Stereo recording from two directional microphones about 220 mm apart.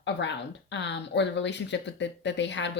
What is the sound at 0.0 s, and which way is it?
A woman's voice, 55° left (ahead or behind).